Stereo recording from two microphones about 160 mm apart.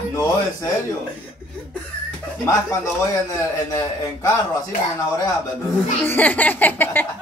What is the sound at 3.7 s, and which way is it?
Speech, 20° left (ahead or behind).